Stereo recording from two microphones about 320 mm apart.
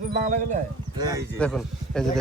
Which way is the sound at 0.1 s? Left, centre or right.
Right.